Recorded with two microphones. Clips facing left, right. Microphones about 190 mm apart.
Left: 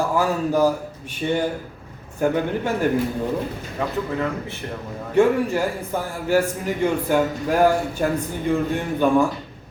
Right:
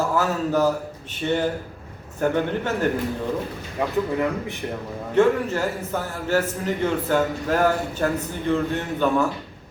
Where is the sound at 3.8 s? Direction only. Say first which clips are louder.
Right 1 dB; 15° right (ahead or behind).